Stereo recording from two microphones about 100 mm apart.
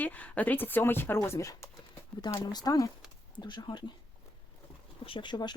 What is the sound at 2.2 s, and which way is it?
Speech, 45° left (ahead or behind).